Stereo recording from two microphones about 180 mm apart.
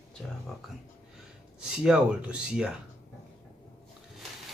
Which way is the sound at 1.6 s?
5° right (ahead or behind).